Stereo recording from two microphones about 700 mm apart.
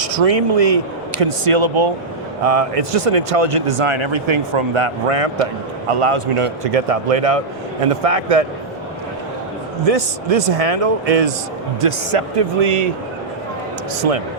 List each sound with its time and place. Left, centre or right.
0.0 s speech: right
2.4 s speech: right
9.8 s speech: right
14.0 s speech: right